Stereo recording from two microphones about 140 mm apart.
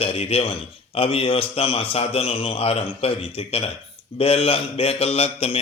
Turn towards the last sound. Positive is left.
turn(degrees=45)  # may be behind; listen again after turning